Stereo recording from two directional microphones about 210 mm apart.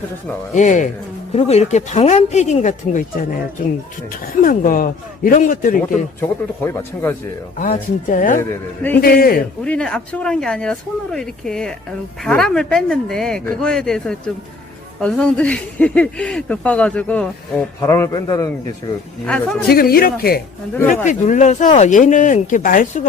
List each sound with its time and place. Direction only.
0.5 s speech: 35° left (ahead or behind)
4.4 s speech: 40° left (ahead or behind)
5.9 s speech: 10° left (ahead or behind)
7.6 s speech: 40° left (ahead or behind)
8.4 s speech: 10° left (ahead or behind)
9.0 s speech: 45° left (ahead or behind)
9.6 s speech: 5° left (ahead or behind)
19.2 s speech: 5° left (ahead or behind)
19.6 s speech: 45° left (ahead or behind)